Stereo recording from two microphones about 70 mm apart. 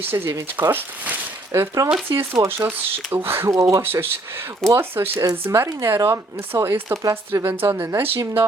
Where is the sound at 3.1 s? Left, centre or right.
Right.